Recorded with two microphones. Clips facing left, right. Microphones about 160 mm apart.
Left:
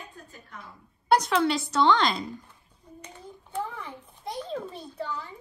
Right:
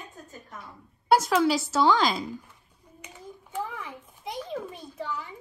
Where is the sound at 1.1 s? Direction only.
5° right (ahead or behind).